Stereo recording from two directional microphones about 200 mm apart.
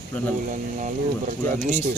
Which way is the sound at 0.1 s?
5° left (ahead or behind).